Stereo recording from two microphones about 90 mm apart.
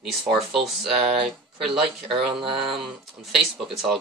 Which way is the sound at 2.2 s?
70° right (ahead or behind).